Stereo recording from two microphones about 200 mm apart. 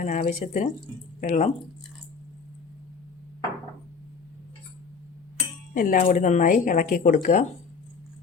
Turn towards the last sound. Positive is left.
turn(degrees=40)  # may be behind; listen again after turning